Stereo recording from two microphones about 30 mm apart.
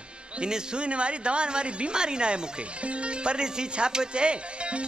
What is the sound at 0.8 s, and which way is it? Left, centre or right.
Music, right.